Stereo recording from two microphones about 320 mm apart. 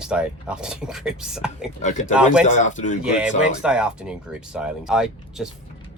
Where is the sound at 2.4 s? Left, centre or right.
Left.